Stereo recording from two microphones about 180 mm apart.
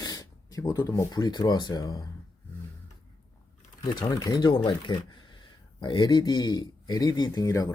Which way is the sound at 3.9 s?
25° left (ahead or behind).